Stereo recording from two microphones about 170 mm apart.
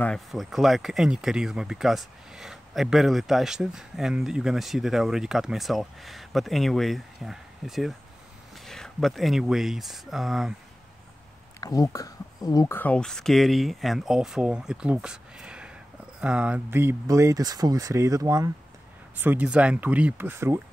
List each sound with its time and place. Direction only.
0.0 s speech: centre (ahead or behind)
11.6 s speech: 20° left (ahead or behind); by 20.6 s 15° right (ahead or behind)